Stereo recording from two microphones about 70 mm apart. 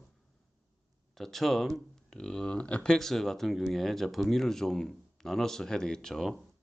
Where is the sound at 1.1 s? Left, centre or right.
Centre.